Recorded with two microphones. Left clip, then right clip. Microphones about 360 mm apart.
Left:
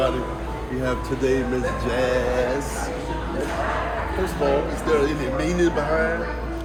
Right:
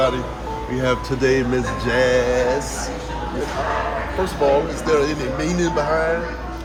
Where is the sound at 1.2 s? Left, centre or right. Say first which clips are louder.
Right 3 dB; right.